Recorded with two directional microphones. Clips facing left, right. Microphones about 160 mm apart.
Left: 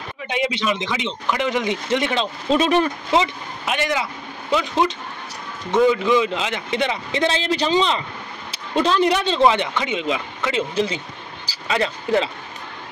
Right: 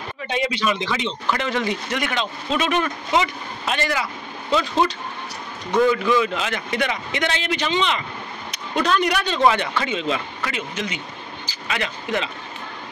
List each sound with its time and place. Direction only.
0.3 s speech: 20° left (ahead or behind)
3.6 s speech: 15° left (ahead or behind)
10.5 s speech: 30° left (ahead or behind)